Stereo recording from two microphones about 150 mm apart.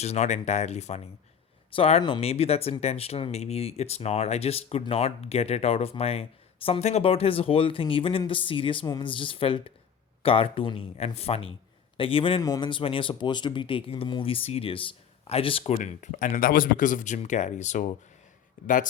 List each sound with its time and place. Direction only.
0.0 s speech: 50° left (ahead or behind); by 2.2 s 30° left (ahead or behind)
2.2 s speech: 45° left (ahead or behind); by 18.9 s 60° left (ahead or behind)